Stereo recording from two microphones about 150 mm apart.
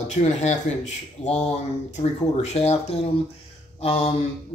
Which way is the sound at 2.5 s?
45° left (ahead or behind).